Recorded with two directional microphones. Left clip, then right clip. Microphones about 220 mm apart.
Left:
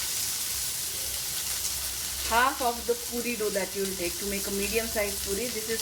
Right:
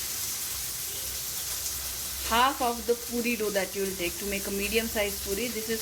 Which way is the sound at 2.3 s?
15° right (ahead or behind).